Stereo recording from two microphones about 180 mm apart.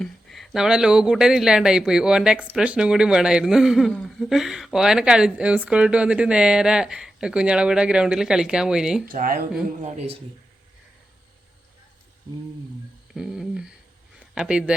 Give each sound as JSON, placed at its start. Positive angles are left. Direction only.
{"t": 0.0, "sound": "speech", "side_deg": 0}
{"t": 9.0, "sound": "speech", "side_deg": -50}
{"t": 9.8, "sound": "speech", "side_deg": -35}
{"t": 13.1, "sound": "a sound", "side_deg": 0}
{"t": 14.2, "sound": "speech", "side_deg": -5}